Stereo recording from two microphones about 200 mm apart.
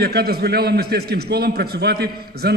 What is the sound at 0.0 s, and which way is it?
A man's voice, 50° right (ahead or behind).